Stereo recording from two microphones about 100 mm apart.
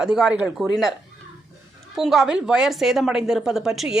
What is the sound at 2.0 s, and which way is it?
A woman's voice, 5° right (ahead or behind).